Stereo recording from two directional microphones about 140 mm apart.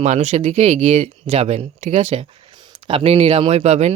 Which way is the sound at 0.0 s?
55° right (ahead or behind).